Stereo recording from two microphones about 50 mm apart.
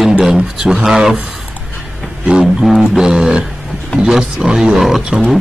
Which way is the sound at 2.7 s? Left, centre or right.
Centre.